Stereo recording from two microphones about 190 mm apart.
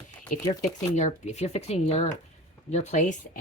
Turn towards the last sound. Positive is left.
turn(degrees=40)  # may be behind; listen again after turning